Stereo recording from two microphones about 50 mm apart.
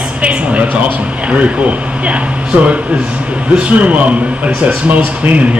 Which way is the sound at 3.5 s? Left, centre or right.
Right.